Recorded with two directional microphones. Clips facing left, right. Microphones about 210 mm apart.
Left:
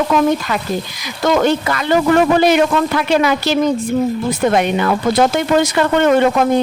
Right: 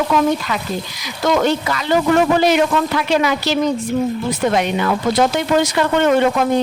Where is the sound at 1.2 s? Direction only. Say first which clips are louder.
Left 2 dB; 50° left (ahead or behind).